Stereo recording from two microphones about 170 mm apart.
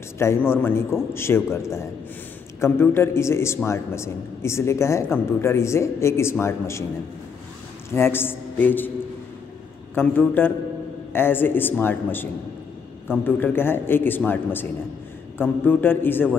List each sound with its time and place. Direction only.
0.2 s a man's voice: 15° left (ahead or behind)
7.9 s a man's voice: 15° left (ahead or behind)
9.9 s a man's voice: 10° left (ahead or behind)